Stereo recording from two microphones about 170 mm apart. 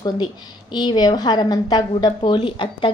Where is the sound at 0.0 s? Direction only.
25° left (ahead or behind).